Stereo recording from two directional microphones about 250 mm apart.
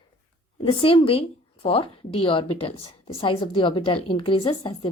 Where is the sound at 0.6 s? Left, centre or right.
Left.